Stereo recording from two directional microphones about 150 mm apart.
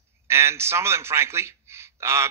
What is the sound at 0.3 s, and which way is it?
Speech, 15° right (ahead or behind).